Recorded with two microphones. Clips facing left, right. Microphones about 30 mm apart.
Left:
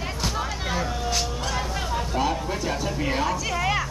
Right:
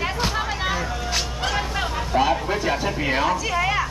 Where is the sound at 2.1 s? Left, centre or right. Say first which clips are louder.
Right 7 dB; right.